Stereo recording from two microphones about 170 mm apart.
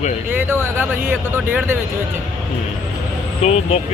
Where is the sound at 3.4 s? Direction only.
40° left (ahead or behind).